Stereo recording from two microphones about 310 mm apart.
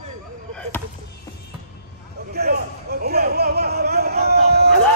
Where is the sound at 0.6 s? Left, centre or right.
Centre.